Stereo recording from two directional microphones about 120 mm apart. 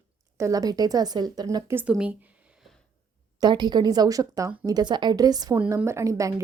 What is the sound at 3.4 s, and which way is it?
Speech, 35° right (ahead or behind).